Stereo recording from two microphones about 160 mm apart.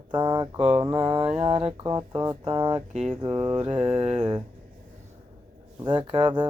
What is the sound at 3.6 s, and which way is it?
Speech, 35° right (ahead or behind).